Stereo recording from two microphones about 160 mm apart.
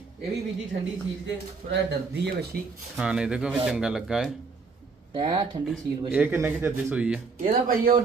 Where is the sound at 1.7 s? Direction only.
90° right.